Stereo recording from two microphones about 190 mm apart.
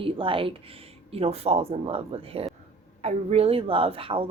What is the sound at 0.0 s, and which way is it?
Speech, 30° right (ahead or behind).